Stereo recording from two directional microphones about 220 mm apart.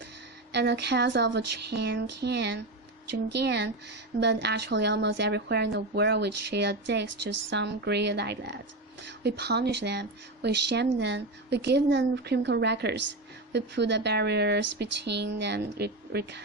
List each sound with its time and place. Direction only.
0.5 s a woman's voice: 50° right (ahead or behind)